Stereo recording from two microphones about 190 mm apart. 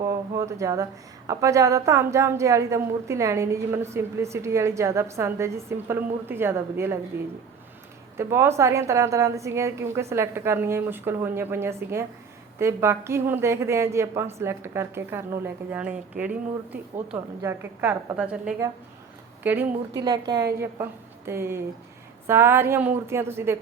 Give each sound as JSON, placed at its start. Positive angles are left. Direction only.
{"t": 0.0, "sound": "speech", "side_deg": -15}
{"t": 8.1, "sound": "speech", "side_deg": -15}
{"t": 20.0, "sound": "a woman's voice", "side_deg": -20}